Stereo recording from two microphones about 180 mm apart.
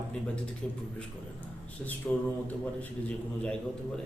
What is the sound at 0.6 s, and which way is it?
Speech, 5° left (ahead or behind).